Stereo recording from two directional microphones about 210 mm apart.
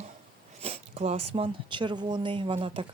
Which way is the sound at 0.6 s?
30° right (ahead or behind).